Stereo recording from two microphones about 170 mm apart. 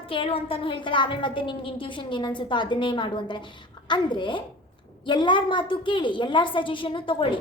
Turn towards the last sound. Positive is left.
turn(degrees=30)  # may be behind; listen again after turning